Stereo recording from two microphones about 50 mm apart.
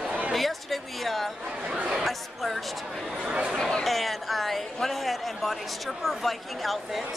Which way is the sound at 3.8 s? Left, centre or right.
Centre.